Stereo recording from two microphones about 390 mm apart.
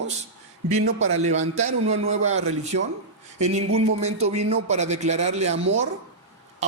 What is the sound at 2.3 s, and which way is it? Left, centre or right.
Speech, right.